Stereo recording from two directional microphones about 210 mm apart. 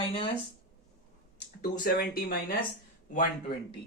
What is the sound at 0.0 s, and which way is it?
Speech, 25° left (ahead or behind).